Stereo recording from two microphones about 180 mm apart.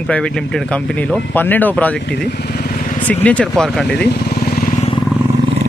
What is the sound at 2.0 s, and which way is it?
Vehicle, 65° left (ahead or behind).